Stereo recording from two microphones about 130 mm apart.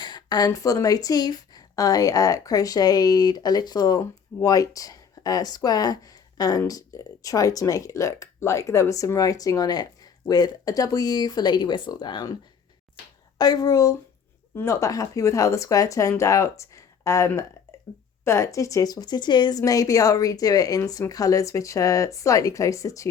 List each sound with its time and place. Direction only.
0.0 s a woman's voice: 35° left (ahead or behind)
13.4 s a woman's voice: 30° left (ahead or behind)